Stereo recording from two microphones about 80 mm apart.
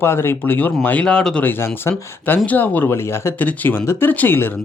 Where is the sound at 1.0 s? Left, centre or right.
Centre.